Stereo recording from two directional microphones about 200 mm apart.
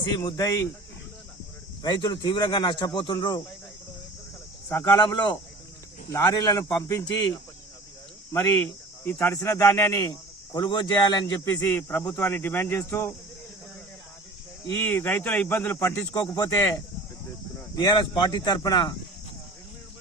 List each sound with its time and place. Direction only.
0.0 s speech: 20° left (ahead or behind)
1.8 s speech: 20° left (ahead or behind)
4.7 s speech: 20° left (ahead or behind)
8.3 s speech: 15° left (ahead or behind)
14.7 s speech: 10° left (ahead or behind)
17.7 s speech: 20° left (ahead or behind)